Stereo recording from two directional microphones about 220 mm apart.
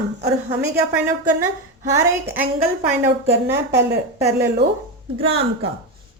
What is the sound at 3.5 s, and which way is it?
Speech, 50° right (ahead or behind).